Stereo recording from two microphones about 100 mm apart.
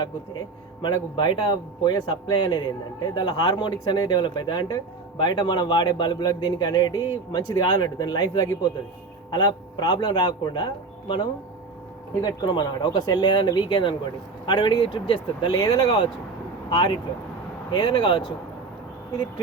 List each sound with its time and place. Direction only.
0.0 s speech: 45° left (ahead or behind)
12.2 s speech: 45° left (ahead or behind)